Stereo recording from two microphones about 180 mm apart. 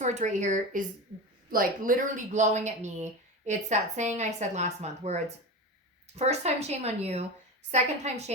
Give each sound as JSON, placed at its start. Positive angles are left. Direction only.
{"t": 0.0, "sound": "speech", "side_deg": -40}